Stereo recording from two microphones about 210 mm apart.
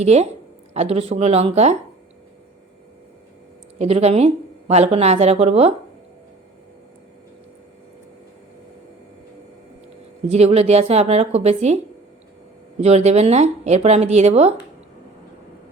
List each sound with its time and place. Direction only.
0.0 s speech: 30° right (ahead or behind)
3.8 s a woman's voice: 30° right (ahead or behind)
10.2 s speech: 30° right (ahead or behind)
12.8 s speech: 30° right (ahead or behind)